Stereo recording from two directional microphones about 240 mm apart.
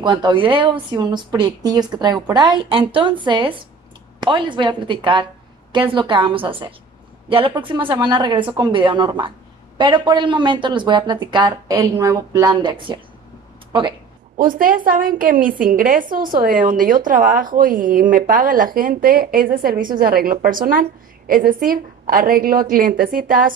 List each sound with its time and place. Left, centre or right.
0.0 s a woman's voice: centre
13.7 s a sound: centre
14.4 s speech: right